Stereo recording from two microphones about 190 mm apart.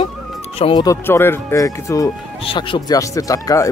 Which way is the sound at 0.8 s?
10° left (ahead or behind).